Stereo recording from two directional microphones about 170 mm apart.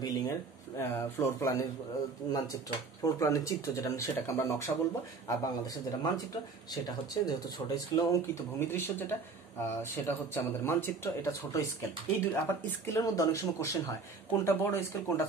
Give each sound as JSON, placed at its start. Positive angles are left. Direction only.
{"t": 0.0, "sound": "speech", "side_deg": 20}